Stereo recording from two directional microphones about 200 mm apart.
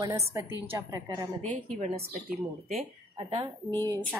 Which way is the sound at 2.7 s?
30° right (ahead or behind).